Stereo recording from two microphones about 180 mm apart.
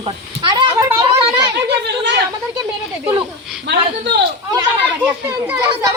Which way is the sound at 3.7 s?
70° right (ahead or behind).